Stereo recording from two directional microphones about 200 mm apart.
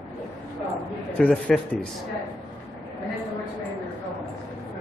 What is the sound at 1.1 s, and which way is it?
Speech, 5° left (ahead or behind).